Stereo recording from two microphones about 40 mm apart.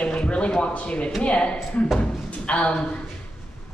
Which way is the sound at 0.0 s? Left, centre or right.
Left.